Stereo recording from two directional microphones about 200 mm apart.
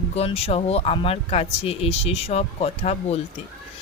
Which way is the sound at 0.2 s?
30° left (ahead or behind).